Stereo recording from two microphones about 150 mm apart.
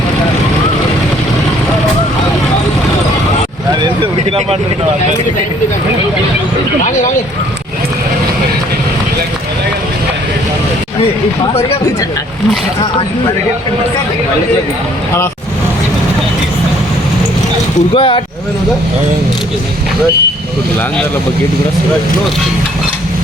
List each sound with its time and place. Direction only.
17.9 s speech: 35° left (ahead or behind)